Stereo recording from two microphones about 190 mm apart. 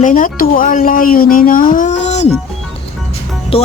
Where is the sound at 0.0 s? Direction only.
45° left (ahead or behind).